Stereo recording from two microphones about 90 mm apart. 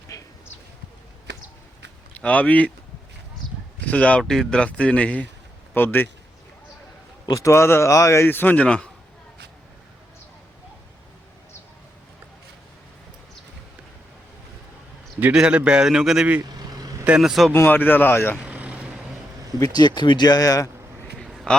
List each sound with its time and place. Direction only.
0.1 s a sound: 45° left (ahead or behind)
2.1 s speech: 15° left (ahead or behind)
3.8 s speech: 15° left (ahead or behind)
4.2 s speech: 5° left (ahead or behind); by 6.1 s 20° left (ahead or behind)
7.3 s speech: 35° left (ahead or behind); by 8.9 s 15° left (ahead or behind)
15.2 s a man's voice: 10° right (ahead or behind)
16.5 s vehicle: 45° right (ahead or behind)
17.1 s speech: 5° right (ahead or behind)
17.5 s speech: 25° left (ahead or behind)
18.3 s vehicle: 15° right (ahead or behind)
19.5 s speech: 45° left (ahead or behind)
21.2 s a sound: centre (ahead or behind)